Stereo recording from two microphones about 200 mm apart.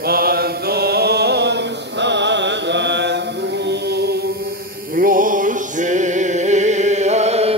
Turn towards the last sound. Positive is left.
turn(degrees=-30)  # may be behind; listen again after turning